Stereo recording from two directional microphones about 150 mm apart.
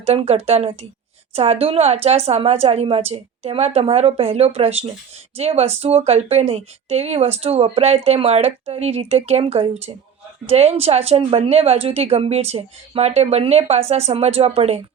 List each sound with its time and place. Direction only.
0.0 s speech: 45° right (ahead or behind)